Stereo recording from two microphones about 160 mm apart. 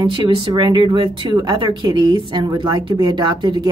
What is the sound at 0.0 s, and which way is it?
Speech, 25° right (ahead or behind).